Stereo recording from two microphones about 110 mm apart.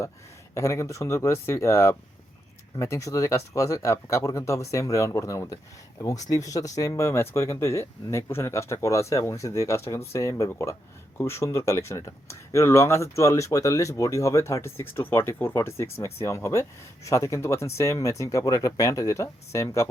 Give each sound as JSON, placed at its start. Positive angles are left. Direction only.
{"t": 0.5, "sound": "speech", "side_deg": 25}